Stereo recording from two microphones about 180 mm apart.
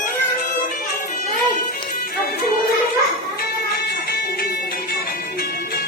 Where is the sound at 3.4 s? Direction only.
55° left (ahead or behind).